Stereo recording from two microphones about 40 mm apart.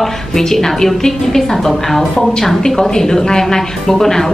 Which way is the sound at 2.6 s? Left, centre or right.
Centre.